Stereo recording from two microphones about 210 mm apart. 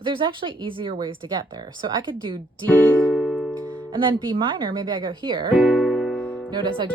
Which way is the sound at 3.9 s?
25° right (ahead or behind).